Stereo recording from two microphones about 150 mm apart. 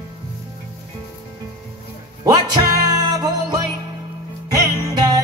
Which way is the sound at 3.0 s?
25° right (ahead or behind).